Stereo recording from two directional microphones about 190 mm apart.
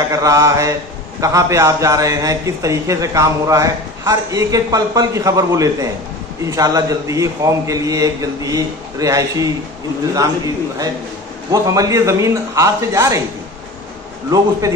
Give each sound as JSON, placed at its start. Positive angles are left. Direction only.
{"t": 0.1, "sound": "a man's voice", "side_deg": -15}
{"t": 14.3, "sound": "a man's voice", "side_deg": -20}